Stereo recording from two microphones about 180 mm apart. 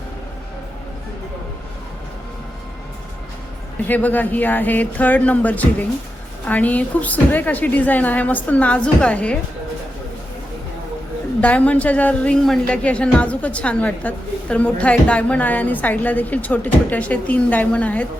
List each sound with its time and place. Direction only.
3.8 s a woman's voice: 10° left (ahead or behind)
11.3 s a woman's voice: 10° left (ahead or behind)